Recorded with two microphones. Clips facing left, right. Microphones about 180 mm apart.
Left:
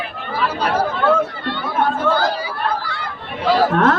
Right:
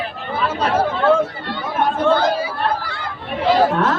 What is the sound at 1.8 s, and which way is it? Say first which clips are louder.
Chatter: right 3 dB; 20° right (ahead or behind).